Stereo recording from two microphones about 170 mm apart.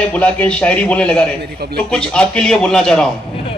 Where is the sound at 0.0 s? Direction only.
10° left (ahead or behind).